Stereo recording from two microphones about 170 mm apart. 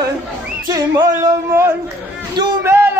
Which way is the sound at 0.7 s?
25° right (ahead or behind).